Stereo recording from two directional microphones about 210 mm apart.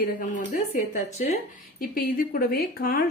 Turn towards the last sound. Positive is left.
turn(degrees=45)  # may be behind; listen again after turning